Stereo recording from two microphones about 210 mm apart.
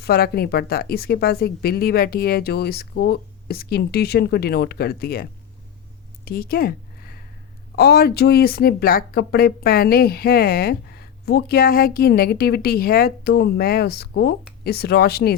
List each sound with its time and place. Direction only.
0.0 s speech: 50° left (ahead or behind)
6.2 s a sound: 45° left (ahead or behind)
7.8 s speech: 45° left (ahead or behind)